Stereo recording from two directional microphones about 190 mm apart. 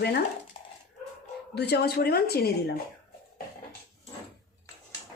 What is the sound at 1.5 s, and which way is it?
Speech, 60° left (ahead or behind).